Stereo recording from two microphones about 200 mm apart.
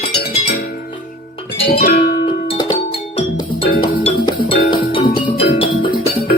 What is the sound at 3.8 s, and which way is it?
Music, 25° left (ahead or behind).